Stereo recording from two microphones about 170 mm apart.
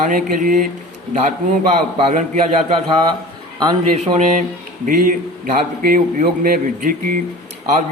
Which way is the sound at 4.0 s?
45° right (ahead or behind).